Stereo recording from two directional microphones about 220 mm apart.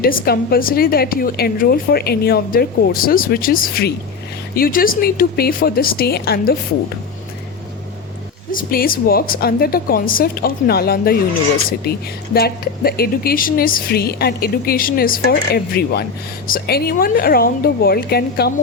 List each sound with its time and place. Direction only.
0.0 s speech: 40° left (ahead or behind)
8.5 s speech: 40° left (ahead or behind)